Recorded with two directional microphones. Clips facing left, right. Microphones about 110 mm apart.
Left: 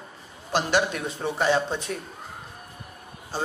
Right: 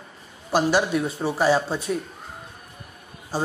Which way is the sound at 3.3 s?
10° right (ahead or behind).